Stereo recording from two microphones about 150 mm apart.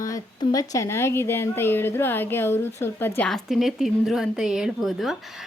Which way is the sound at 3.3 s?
Centre (ahead or behind).